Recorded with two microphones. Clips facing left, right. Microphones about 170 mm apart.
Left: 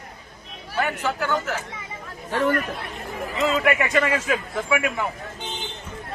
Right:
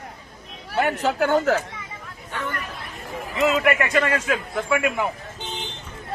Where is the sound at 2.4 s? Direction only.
50° left (ahead or behind).